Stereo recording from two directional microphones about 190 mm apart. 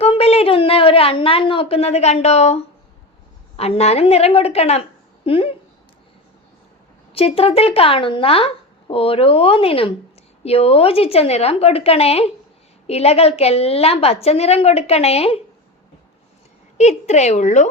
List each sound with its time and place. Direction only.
0.0 s a sound: 30° left (ahead or behind)
3.6 s a woman's voice: 35° left (ahead or behind)
7.1 s a woman's voice: 30° left (ahead or behind)
16.7 s a woman's voice: 35° left (ahead or behind)